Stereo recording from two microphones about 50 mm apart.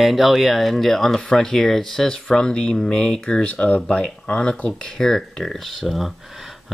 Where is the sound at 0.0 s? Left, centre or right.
Centre.